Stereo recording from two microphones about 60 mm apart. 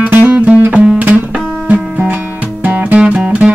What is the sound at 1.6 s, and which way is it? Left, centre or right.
Music, right.